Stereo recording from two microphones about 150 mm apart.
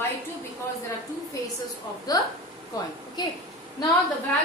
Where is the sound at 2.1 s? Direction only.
25° left (ahead or behind).